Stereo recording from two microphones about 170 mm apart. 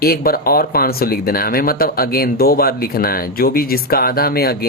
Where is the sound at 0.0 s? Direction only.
65° left (ahead or behind).